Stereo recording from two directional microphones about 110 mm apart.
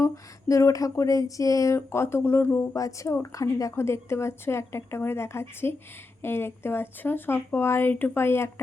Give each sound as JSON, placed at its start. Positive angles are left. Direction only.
{"t": 0.0, "sound": "speech", "side_deg": 30}
{"t": 2.7, "sound": "speech", "side_deg": 30}